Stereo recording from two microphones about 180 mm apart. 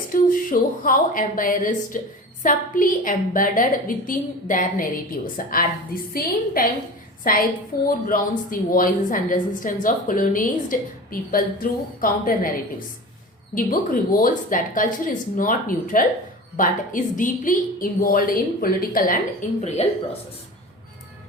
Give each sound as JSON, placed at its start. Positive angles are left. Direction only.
{"t": 0.1, "sound": "a woman's voice", "side_deg": 50}
{"t": 13.6, "sound": "a woman's voice", "side_deg": 50}